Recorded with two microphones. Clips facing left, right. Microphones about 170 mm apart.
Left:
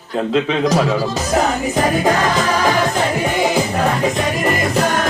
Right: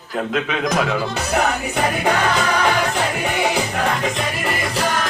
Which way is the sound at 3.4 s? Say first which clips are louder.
Left 3 dB; 35° left (ahead or behind).